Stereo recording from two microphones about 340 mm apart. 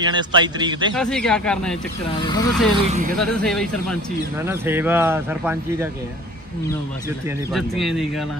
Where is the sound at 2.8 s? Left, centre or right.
Right.